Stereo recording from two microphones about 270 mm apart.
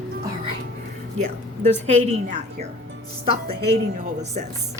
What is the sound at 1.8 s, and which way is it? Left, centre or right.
Speech, right.